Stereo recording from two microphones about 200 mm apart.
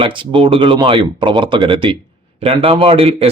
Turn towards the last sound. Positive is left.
turn(degrees=-30)  # may be behind; listen again after turning